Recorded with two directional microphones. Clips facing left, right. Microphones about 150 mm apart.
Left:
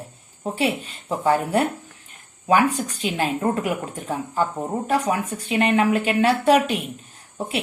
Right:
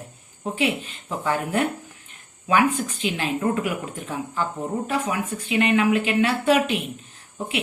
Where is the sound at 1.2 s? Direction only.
40° left (ahead or behind).